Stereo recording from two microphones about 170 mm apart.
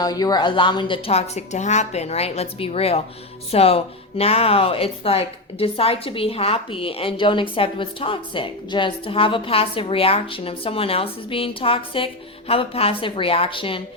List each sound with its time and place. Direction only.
0.0 s a woman's voice: 25° left (ahead or behind)